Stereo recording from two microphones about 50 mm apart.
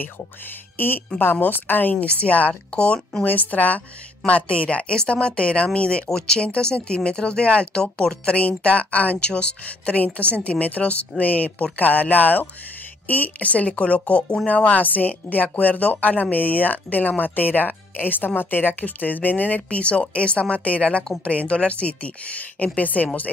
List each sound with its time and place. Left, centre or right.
0.7 s a woman's voice: left
3.3 s speech: left; by 8.2 s centre
8.3 s speech: left